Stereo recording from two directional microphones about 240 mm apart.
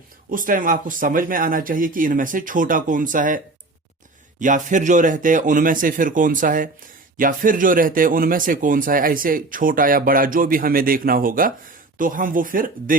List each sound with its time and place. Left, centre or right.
0.3 s speech: right